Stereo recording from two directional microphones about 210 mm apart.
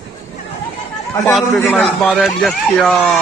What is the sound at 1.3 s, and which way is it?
Speech, centre (ahead or behind).